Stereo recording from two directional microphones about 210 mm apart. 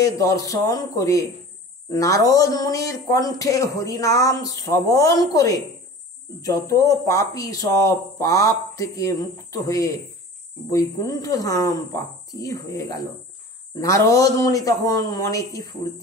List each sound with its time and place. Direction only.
0.0 s speech: 15° left (ahead or behind)